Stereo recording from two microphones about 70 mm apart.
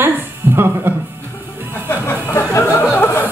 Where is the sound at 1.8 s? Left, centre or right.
Left.